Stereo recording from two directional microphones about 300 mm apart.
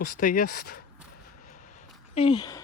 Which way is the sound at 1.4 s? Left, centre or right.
Left.